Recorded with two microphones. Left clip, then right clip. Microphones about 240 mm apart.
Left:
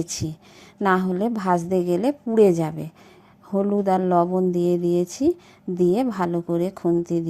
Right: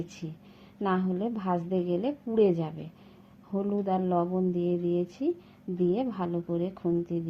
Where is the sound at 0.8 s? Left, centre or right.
Left.